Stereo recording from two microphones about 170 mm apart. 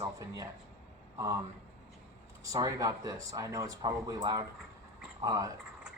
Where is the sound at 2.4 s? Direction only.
20° right (ahead or behind).